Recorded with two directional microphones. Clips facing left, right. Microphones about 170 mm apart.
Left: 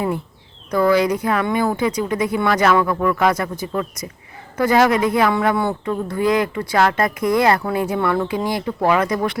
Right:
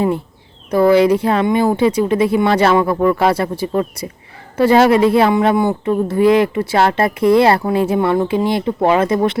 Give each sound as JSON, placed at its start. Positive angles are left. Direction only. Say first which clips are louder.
{"t": 0.7, "sound": "speech", "louder": "right 5 dB", "side_deg": -25}